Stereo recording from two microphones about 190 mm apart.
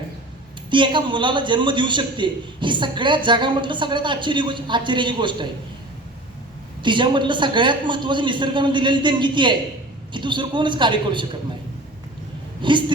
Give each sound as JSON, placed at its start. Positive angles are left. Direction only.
{"t": 0.7, "sound": "a man's voice", "side_deg": -25}
{"t": 6.8, "sound": "a man's voice", "side_deg": -25}
{"t": 12.6, "sound": "a man's voice", "side_deg": -25}